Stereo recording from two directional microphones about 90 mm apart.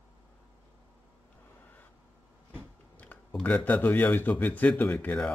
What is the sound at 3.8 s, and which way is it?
Speech, 10° left (ahead or behind).